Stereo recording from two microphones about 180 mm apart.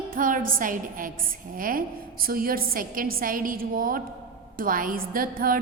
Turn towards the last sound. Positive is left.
turn(degrees=-50)  # may be behind; listen again after turning